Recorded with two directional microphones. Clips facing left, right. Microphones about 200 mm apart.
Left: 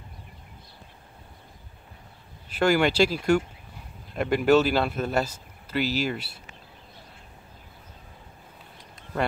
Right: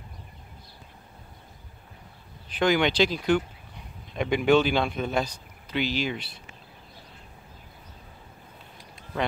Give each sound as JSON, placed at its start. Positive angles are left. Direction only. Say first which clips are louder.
{"t": 2.6, "sound": "speech", "louder": "left 1 dB", "side_deg": 5}